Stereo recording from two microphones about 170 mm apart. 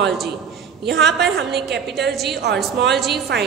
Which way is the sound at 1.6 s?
80° right.